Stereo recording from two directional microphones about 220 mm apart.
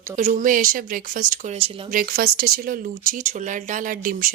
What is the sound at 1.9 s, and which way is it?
Speech, 40° right (ahead or behind).